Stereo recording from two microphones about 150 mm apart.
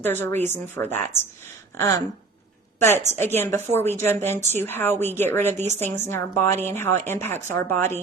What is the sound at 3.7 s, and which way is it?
Speech, 15° left (ahead or behind).